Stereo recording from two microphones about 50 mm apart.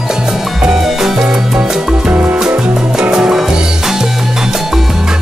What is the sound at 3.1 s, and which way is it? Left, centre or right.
Music, centre.